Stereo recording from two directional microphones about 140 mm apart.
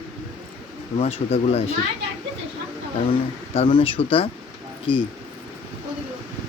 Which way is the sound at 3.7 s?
40° left (ahead or behind).